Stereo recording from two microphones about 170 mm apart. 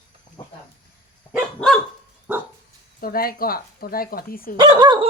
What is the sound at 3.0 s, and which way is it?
Speech, 60° left (ahead or behind).